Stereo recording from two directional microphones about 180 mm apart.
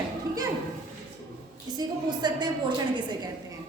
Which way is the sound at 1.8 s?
20° right (ahead or behind).